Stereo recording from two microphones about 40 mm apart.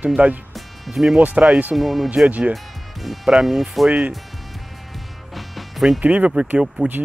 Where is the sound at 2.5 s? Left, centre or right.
Centre.